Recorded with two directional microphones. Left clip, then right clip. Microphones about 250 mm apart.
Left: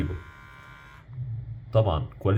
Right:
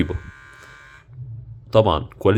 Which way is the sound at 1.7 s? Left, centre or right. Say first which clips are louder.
Right 9 dB; right.